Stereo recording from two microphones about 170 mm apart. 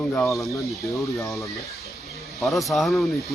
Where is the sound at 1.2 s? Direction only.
Centre (ahead or behind).